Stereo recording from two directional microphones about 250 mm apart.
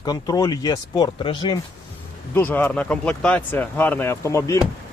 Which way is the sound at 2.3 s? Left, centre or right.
Centre.